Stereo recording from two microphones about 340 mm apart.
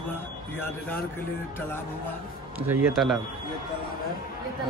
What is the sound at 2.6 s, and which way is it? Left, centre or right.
Speech, centre.